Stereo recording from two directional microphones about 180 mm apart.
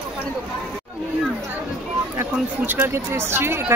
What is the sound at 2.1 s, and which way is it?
Speech, 10° right (ahead or behind).